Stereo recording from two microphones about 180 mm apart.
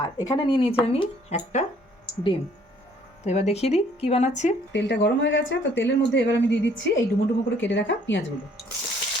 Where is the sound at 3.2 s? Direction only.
35° left (ahead or behind).